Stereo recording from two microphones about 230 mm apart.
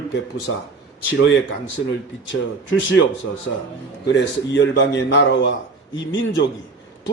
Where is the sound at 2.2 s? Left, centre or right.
Left.